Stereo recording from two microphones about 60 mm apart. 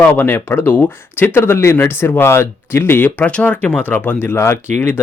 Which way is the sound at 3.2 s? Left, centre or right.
Left.